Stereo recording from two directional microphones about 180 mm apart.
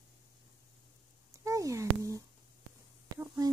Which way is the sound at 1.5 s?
15° right (ahead or behind).